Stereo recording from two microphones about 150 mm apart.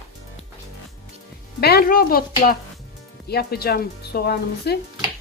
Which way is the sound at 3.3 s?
90° left.